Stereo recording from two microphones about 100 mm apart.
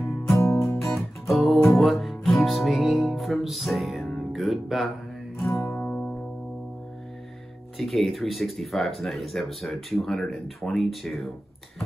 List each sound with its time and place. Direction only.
0.4 s music: 25° left (ahead or behind)
0.7 s music: centre (ahead or behind)
5.4 s music: 25° left (ahead or behind)
5.8 s music: 10° left (ahead or behind)
7.7 s speech: centre (ahead or behind)